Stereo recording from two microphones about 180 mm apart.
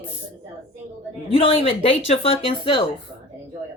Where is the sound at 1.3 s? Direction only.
30° left (ahead or behind).